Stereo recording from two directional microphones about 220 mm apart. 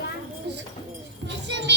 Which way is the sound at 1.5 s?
55° right (ahead or behind).